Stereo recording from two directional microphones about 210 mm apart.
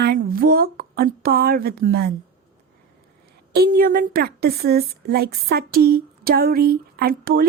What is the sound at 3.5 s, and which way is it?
Speech, 45° right (ahead or behind).